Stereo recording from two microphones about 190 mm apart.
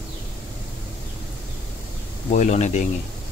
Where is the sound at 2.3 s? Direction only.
40° left (ahead or behind).